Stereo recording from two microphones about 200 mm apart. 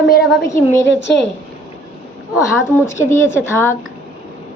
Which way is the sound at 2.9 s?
15° left (ahead or behind).